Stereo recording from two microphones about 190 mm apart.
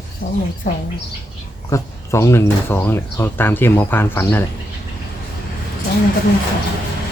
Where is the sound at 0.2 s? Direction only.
50° left (ahead or behind).